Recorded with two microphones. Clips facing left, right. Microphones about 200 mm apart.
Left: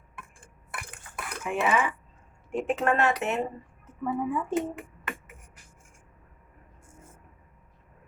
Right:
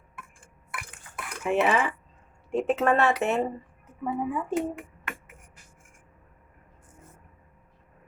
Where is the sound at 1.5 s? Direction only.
30° right (ahead or behind).